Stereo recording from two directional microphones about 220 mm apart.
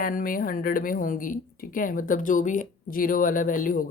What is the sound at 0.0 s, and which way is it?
Speech, 40° left (ahead or behind).